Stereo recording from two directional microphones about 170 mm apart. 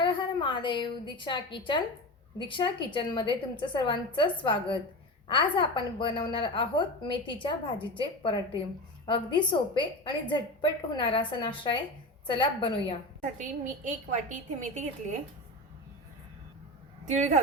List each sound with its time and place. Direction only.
0.0 s a woman's voice: 25° left (ahead or behind)
13.4 s a woman's voice: 45° right (ahead or behind)
17.1 s a woman's voice: 45° right (ahead or behind)